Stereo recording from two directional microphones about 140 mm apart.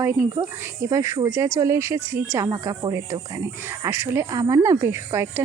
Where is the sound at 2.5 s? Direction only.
25° right (ahead or behind).